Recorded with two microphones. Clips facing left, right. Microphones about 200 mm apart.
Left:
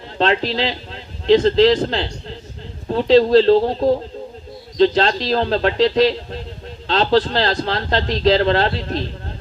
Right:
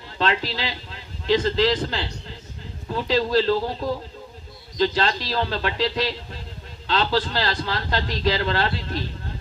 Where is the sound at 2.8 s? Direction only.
35° left (ahead or behind).